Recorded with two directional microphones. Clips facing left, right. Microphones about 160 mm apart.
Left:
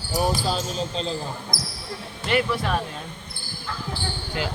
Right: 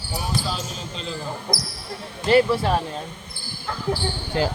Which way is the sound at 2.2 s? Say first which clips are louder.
Right 6 dB; 30° right (ahead or behind).